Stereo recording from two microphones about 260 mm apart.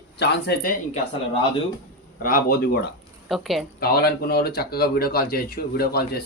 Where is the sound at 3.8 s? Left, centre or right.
Left.